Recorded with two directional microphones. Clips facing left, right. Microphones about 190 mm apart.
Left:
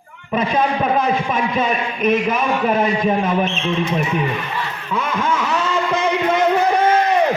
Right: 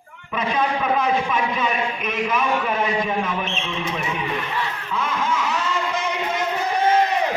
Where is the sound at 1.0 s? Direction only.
40° left (ahead or behind).